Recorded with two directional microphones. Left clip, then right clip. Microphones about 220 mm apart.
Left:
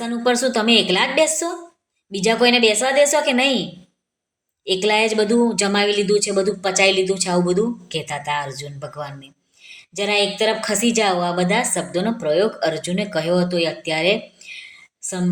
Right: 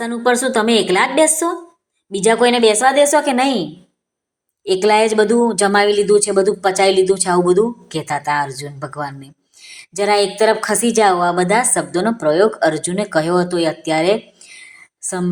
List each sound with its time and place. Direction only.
0.0 s a woman's voice: 10° right (ahead or behind)